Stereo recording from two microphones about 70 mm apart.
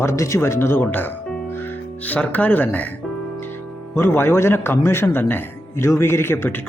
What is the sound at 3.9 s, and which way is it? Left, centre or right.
A man's voice, left.